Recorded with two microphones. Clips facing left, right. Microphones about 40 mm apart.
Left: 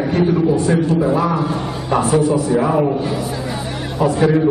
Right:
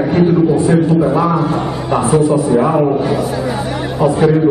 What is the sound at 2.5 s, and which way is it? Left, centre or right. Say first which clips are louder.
Speech: right 3 dB; centre.